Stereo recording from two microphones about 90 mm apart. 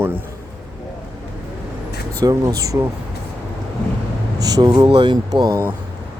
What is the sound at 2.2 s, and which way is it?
Speech, 40° right (ahead or behind).